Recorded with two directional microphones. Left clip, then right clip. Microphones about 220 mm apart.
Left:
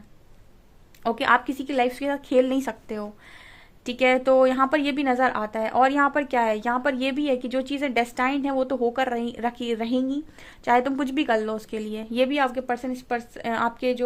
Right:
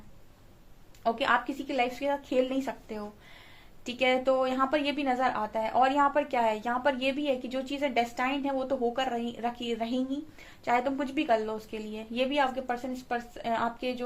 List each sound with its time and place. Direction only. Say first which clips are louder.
1.0 s a woman's voice: left 6 dB; 45° left (ahead or behind)